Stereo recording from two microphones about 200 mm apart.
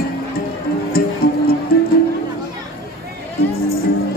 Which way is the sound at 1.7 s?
50° left (ahead or behind).